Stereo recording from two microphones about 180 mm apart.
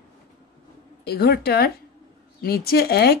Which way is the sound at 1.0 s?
60° left (ahead or behind).